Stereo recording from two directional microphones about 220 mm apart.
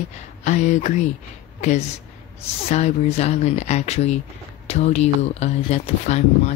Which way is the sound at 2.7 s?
30° left (ahead or behind).